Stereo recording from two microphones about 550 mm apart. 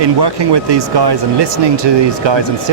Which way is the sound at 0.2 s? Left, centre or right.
Right.